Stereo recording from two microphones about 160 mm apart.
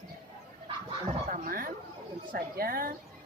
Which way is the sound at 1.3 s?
65° right (ahead or behind).